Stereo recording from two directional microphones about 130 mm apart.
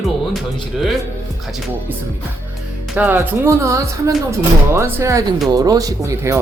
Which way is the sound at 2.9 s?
15° right (ahead or behind).